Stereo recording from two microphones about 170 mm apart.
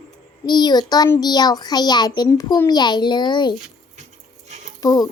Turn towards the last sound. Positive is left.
turn(degrees=20)  # may be behind; listen again after turning